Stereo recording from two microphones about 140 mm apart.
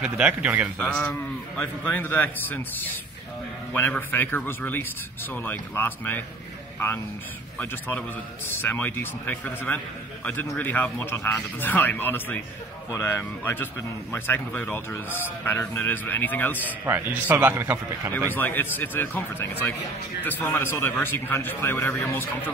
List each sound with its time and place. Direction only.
0.0 s a man's voice: 10° right (ahead or behind)
0.7 s a man's voice: 10° left (ahead or behind)
7.5 s a man's voice: 15° left (ahead or behind)
16.8 s a man's voice: 15° right (ahead or behind)
18.3 s a man's voice: 15° left (ahead or behind)